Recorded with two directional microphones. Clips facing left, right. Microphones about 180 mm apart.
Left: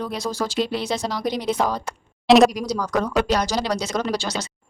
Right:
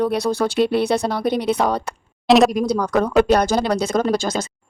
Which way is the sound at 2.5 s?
55° right (ahead or behind).